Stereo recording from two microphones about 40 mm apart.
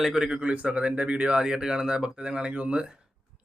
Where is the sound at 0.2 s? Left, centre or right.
Right.